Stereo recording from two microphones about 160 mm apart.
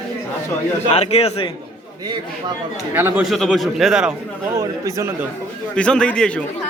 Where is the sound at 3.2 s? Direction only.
Centre (ahead or behind).